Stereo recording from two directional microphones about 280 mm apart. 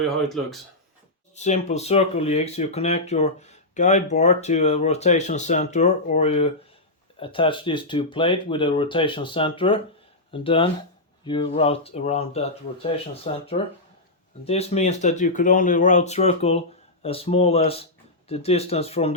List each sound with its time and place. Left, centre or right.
0.2 s speech: centre
1.4 s speech: left